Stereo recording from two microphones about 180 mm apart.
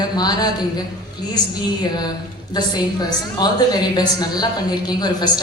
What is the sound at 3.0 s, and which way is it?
A woman's voice, 20° left (ahead or behind).